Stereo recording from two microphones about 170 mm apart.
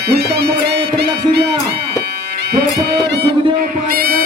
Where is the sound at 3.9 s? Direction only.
60° right (ahead or behind).